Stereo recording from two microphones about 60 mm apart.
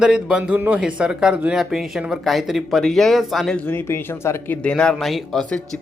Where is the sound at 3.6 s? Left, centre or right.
Left.